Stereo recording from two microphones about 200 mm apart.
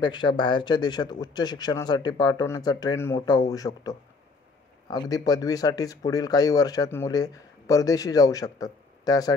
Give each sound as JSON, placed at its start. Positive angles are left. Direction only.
{"t": 0.0, "sound": "speech", "side_deg": 20}